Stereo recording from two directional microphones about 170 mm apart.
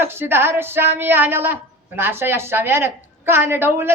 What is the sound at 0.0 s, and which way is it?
A woman's voice, 15° right (ahead or behind).